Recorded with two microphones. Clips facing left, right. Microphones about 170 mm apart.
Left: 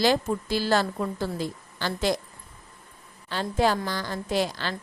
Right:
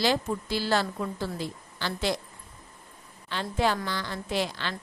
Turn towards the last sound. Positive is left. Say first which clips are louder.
# left 3 dB
turn(degrees=40)  # may be behind; listen again after turning